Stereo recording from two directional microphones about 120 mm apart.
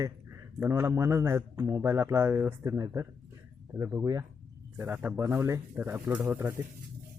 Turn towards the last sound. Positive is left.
turn(degrees=-20)  # may be behind; listen again after turning